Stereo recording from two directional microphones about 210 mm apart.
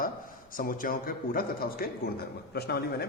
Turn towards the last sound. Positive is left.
turn(degrees=50)  # may be behind; listen again after turning